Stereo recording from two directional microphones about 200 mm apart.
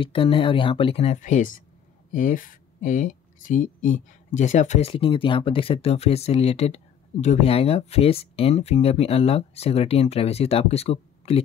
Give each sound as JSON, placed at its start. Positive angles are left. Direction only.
{"t": 0.0, "sound": "speech", "side_deg": 25}